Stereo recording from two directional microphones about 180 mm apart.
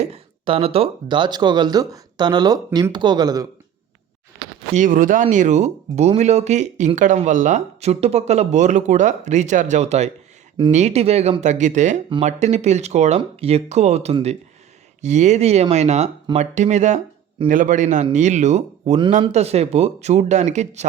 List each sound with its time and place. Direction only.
0.0 s speech: 35° right (ahead or behind)
4.7 s speech: 45° right (ahead or behind)